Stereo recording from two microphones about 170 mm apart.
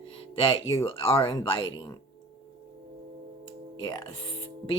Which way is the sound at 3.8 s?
30° left (ahead or behind).